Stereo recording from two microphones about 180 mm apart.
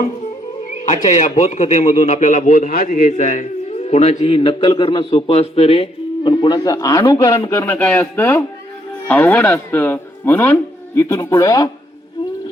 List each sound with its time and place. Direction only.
1.1 s a man's voice: 40° left (ahead or behind); by 11.7 s 20° left (ahead or behind)